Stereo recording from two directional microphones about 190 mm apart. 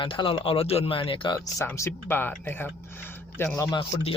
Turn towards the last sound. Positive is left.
turn(degrees=25)  # may be behind; listen again after turning